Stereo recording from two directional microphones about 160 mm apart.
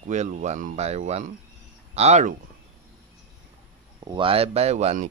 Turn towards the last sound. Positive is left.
turn(degrees=-45)  # may be behind; listen again after turning